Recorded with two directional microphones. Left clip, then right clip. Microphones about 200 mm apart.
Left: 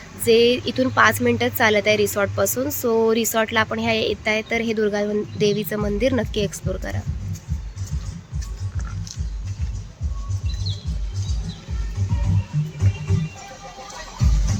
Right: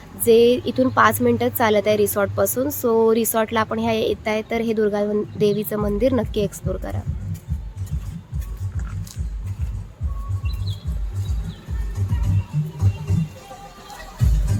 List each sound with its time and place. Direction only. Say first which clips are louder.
0.3 s a woman's voice: right 2 dB; 15° right (ahead or behind)